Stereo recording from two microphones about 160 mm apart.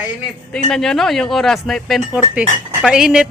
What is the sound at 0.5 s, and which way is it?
Speech, 5° left (ahead or behind).